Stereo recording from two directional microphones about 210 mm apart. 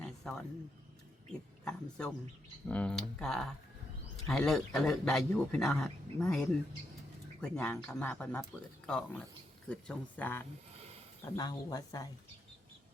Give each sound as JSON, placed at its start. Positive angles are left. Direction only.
{"t": 0.2, "sound": "a man's voice", "side_deg": 5}